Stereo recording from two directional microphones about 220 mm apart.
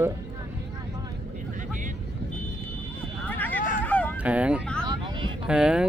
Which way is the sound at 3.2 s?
10° left (ahead or behind).